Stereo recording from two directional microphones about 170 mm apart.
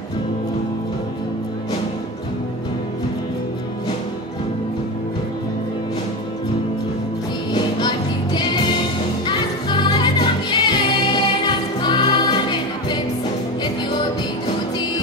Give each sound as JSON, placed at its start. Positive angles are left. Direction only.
{"t": 7.5, "sound": "music", "side_deg": 25}